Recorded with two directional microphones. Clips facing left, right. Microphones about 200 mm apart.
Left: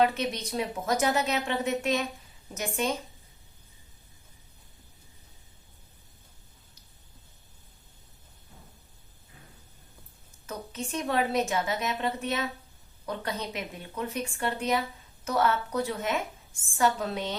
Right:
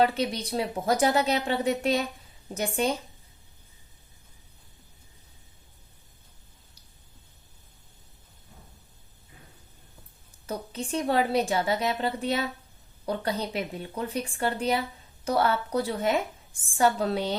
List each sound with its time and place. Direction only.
0.0 s a woman's voice: 35° right (ahead or behind)
10.4 s a sound: 35° right (ahead or behind)
10.9 s a woman's voice: 30° right (ahead or behind)